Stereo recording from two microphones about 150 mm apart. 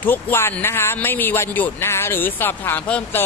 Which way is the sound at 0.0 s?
15° left (ahead or behind).